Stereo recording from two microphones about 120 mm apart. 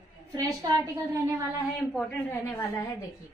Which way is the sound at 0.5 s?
30° right (ahead or behind).